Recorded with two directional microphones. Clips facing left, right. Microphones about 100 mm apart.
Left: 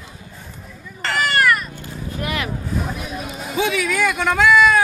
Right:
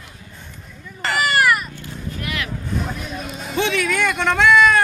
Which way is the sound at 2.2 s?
30° left (ahead or behind).